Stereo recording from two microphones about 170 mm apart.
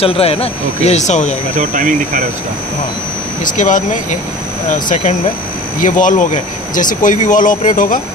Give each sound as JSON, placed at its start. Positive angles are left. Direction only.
{"t": 0.0, "sound": "speech", "side_deg": 35}
{"t": 1.6, "sound": "speech", "side_deg": -50}
{"t": 3.5, "sound": "speech", "side_deg": 50}